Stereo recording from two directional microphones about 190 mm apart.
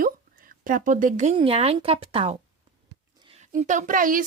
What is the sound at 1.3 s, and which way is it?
Speech, 30° right (ahead or behind).